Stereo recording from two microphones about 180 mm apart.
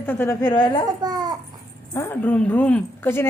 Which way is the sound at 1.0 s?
20° right (ahead or behind).